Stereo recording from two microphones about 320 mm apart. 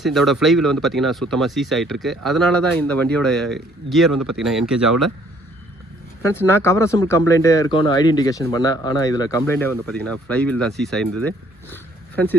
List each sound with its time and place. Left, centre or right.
0.0 s speech: centre
4.1 s speech: right
4.4 s speech: centre
6.2 s speech: centre